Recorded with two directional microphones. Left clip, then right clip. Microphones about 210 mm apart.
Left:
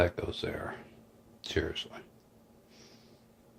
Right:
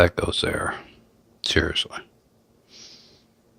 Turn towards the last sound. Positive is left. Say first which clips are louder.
# right 11 dB
turn(degrees=-50)  # may be behind; listen again after turning